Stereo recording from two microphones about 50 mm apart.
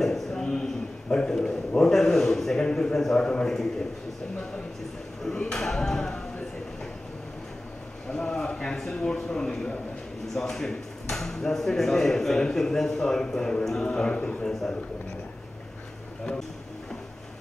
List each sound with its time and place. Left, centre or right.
0.0 s a sound: centre
1.1 s a man's voice: centre
5.2 s speech: centre
8.1 s speech: centre